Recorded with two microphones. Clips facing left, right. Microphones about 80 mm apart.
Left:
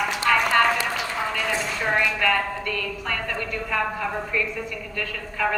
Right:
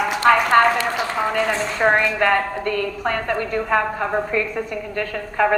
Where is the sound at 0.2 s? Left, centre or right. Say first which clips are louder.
Right 6 dB; right.